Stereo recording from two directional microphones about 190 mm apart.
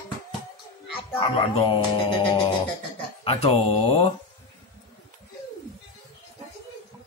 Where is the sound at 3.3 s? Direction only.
30° left (ahead or behind).